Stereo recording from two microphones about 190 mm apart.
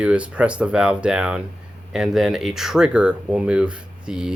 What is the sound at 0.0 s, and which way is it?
Speech, 5° right (ahead or behind).